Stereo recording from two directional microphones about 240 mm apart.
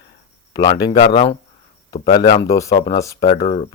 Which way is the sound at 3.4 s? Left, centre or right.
Left.